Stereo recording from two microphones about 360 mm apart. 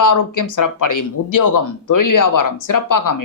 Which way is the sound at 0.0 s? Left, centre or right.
Left.